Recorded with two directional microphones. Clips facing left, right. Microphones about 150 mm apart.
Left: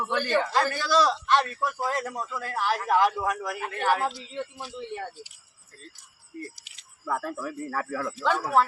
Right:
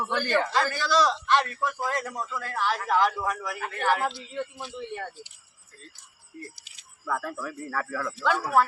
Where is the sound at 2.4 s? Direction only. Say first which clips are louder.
Left 1 dB; 35° left (ahead or behind).